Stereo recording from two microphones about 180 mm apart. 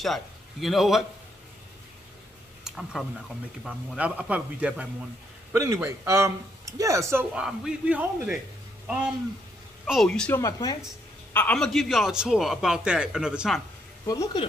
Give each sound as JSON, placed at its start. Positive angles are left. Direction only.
{"t": 0.0, "sound": "a man's voice", "side_deg": 0}
{"t": 2.6, "sound": "a sound", "side_deg": 0}
{"t": 3.6, "sound": "a man's voice", "side_deg": -5}
{"t": 7.3, "sound": "a man's voice", "side_deg": -5}
{"t": 10.4, "sound": "speech", "side_deg": 20}
{"t": 11.3, "sound": "a man's voice", "side_deg": 5}
{"t": 14.0, "sound": "speech", "side_deg": 20}